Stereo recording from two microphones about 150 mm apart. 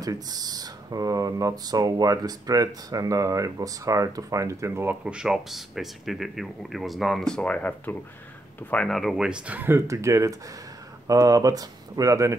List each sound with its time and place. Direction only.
0.0 s speech: 25° right (ahead or behind)
5.0 s speech: 5° right (ahead or behind)